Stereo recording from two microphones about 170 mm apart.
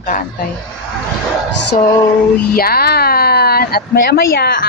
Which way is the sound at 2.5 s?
65° left (ahead or behind).